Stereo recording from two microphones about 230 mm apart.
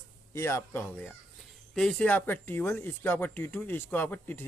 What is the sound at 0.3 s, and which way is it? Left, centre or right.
Speech, centre.